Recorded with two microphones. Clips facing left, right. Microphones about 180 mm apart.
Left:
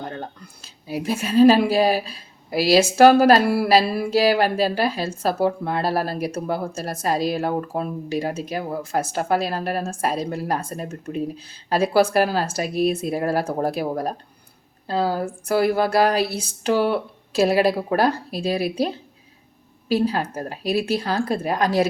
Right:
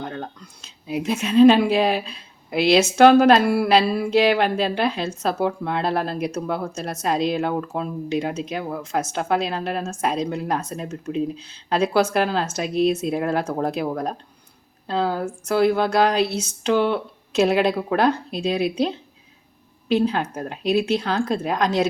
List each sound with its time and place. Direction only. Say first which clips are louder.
0.0 s a sound: right 1 dB; 5° left (ahead or behind)
0.9 s speech: right 1 dB; centre (ahead or behind)
10.8 s speech: right 2 dB; 55° left (ahead or behind)
11.2 s speech: right 2 dB; 5° left (ahead or behind)
19.9 s speech: right 1 dB; 5° left (ahead or behind)